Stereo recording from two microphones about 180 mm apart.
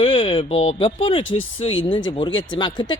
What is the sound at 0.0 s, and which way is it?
Speech, 30° left (ahead or behind).